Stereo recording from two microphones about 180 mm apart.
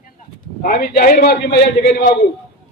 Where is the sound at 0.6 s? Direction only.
55° left (ahead or behind); by 2.1 s 70° left (ahead or behind).